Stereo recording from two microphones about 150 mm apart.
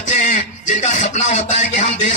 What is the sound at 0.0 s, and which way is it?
Speech, 55° left (ahead or behind).